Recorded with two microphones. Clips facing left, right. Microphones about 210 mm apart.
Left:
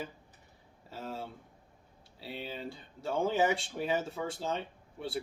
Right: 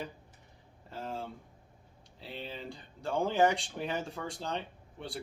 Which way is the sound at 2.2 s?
5° left (ahead or behind).